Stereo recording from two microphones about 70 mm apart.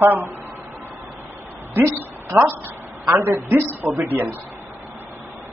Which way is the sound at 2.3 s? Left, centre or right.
Right.